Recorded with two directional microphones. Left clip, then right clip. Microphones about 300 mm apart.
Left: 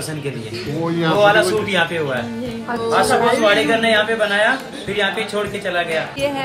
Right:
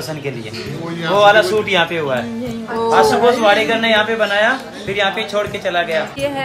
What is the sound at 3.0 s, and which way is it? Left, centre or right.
A man's voice, right.